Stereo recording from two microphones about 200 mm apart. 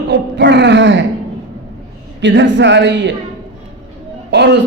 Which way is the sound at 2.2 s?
60° right (ahead or behind).